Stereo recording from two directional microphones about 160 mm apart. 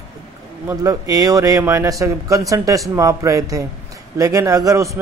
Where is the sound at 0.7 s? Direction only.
20° right (ahead or behind).